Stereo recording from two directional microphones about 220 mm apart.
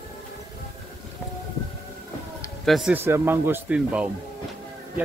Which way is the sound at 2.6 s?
Centre (ahead or behind).